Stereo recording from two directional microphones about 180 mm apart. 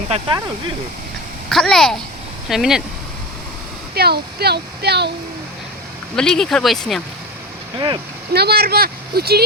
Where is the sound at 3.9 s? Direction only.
60° right (ahead or behind).